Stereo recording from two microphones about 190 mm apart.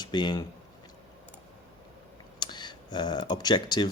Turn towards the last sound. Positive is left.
turn(degrees=25)  # may be behind; listen again after turning